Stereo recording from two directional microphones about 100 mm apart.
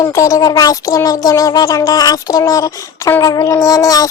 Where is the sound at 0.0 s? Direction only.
35° left (ahead or behind).